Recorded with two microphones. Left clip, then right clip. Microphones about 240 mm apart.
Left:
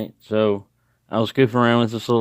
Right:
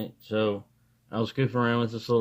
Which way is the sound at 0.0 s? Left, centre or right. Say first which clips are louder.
Left 7 dB; left.